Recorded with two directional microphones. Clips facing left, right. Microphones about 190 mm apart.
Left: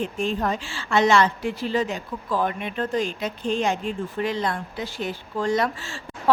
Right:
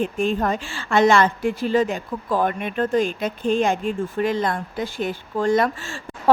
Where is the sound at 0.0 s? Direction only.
55° right (ahead or behind).